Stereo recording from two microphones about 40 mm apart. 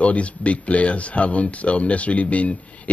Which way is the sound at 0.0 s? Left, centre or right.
Left.